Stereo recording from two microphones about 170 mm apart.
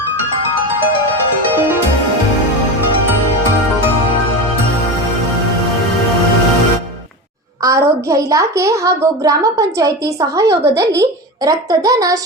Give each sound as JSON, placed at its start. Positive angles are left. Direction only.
{"t": 7.6, "sound": "a woman's voice", "side_deg": -20}